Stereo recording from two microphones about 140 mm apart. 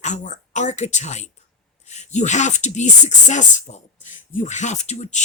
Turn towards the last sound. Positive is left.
turn(degrees=55)  # may be behind; listen again after turning